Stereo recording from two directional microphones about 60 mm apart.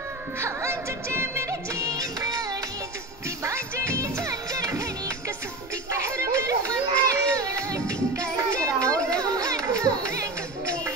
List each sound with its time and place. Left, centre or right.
0.4 s music: right
1.5 s music of bollywood: right
3.4 s music: right
7.9 s music: right
8.5 s children playing: right
9.2 s music: right